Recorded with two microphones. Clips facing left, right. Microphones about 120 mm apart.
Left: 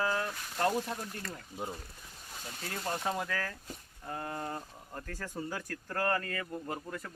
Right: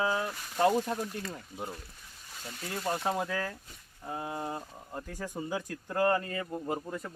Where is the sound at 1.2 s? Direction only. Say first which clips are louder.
Right 3 dB; 15° right (ahead or behind).